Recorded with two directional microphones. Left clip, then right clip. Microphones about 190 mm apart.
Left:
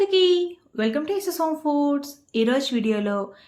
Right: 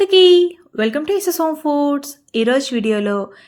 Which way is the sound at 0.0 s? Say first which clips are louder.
Right 9 dB; 35° right (ahead or behind).